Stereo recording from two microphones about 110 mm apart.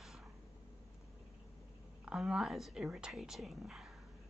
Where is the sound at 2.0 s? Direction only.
5° right (ahead or behind).